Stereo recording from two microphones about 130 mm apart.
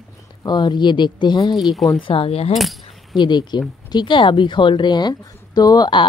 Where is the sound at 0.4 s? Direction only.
30° left (ahead or behind).